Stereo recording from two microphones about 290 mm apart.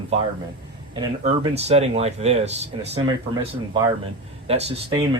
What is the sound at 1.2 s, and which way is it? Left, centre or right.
Speech, right.